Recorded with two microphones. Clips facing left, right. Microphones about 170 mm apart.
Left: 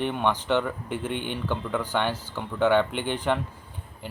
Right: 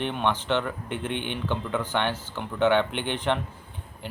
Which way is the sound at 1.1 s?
60° right (ahead or behind).